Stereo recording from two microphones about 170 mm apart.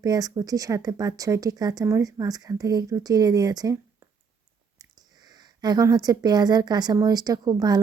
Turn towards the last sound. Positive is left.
turn(degrees=-25)  # may be behind; listen again after turning